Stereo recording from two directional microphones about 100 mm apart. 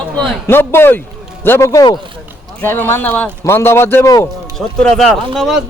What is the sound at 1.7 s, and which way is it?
Speech, 40° left (ahead or behind).